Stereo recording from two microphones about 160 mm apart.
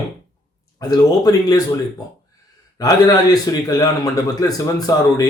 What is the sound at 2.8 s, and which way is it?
A man's voice, 25° left (ahead or behind).